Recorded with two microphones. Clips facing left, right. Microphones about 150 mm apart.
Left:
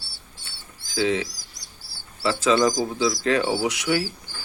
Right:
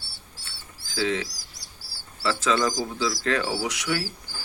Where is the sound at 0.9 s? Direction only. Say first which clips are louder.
Left 3 dB; 15° left (ahead or behind).